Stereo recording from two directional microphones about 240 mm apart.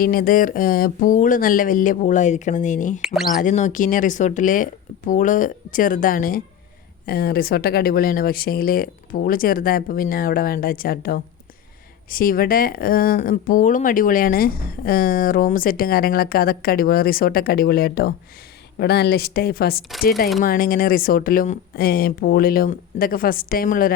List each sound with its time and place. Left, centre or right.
0.0 s speech: left
3.0 s speech: centre
3.3 s speech: left